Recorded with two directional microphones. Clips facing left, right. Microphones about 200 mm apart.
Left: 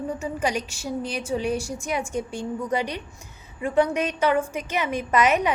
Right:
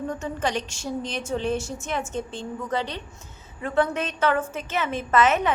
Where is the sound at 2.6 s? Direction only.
15° left (ahead or behind).